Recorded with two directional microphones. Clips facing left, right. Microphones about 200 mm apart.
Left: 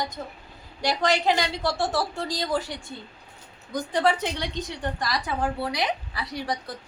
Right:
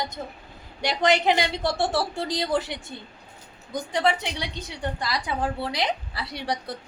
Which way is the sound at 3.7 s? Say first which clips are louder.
Left 1 dB; 15° right (ahead or behind).